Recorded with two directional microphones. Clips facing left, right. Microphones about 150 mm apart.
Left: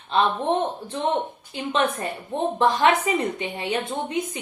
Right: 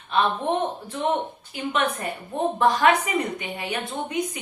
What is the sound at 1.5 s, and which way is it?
A woman's voice, 30° left (ahead or behind).